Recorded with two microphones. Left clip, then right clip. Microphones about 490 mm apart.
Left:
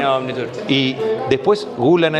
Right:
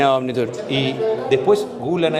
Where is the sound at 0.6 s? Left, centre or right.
Left.